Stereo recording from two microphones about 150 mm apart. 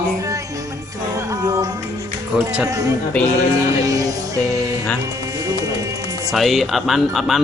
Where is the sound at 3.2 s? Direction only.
10° left (ahead or behind).